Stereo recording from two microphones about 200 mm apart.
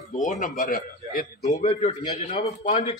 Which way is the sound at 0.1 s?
40° left (ahead or behind).